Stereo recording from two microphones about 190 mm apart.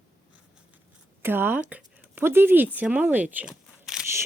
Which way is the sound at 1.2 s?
10° right (ahead or behind).